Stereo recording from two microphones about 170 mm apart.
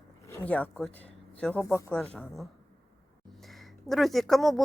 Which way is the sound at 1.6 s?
15° left (ahead or behind).